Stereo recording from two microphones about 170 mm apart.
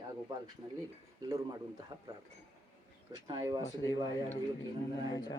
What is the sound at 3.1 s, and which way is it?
Speech, 20° right (ahead or behind).